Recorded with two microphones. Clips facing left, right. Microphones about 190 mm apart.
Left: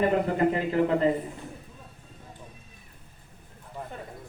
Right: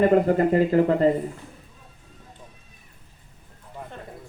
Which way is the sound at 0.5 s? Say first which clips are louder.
Right 6 dB; 45° right (ahead or behind).